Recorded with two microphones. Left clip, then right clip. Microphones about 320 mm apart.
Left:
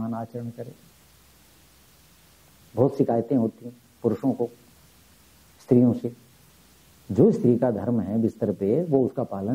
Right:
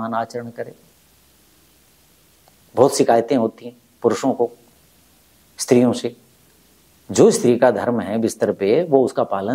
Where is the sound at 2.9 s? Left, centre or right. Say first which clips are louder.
Right 8 dB; centre.